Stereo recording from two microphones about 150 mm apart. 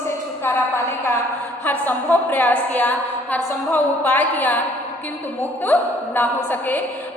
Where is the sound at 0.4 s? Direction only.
15° left (ahead or behind).